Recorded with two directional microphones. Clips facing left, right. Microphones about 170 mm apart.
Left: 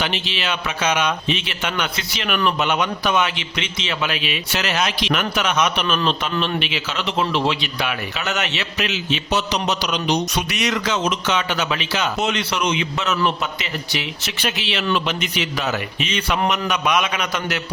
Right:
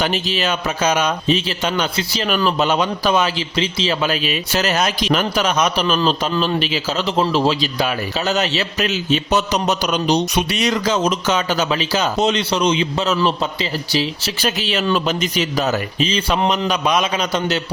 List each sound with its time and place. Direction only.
0.0 s a man's voice: 40° right (ahead or behind)
10.2 s a man's voice: 25° right (ahead or behind)